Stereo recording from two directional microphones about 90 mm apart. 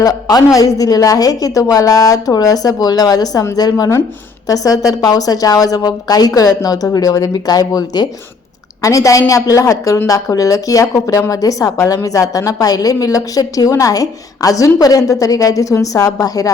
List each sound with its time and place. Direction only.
0.0 s a woman's voice: 45° left (ahead or behind)